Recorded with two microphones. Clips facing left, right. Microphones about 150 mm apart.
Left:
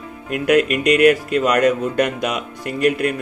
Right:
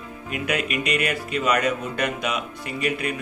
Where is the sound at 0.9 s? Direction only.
55° left (ahead or behind).